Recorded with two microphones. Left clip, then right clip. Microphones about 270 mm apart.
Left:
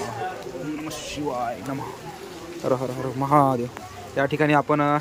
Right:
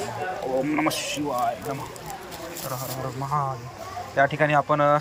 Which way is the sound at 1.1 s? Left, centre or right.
Centre.